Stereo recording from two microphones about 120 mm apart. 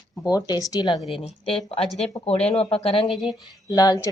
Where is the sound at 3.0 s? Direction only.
Centre (ahead or behind).